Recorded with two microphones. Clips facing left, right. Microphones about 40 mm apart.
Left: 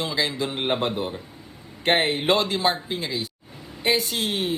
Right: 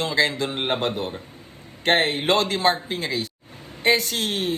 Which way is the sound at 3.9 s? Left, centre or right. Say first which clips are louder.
Even; centre.